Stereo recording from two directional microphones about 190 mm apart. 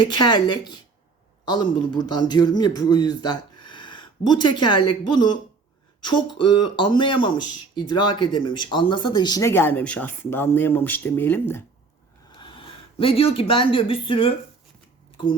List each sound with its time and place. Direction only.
0.0 s a man's voice: 25° left (ahead or behind)
12.4 s speech: 25° left (ahead or behind)